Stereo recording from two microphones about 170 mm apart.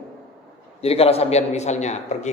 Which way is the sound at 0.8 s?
35° left (ahead or behind).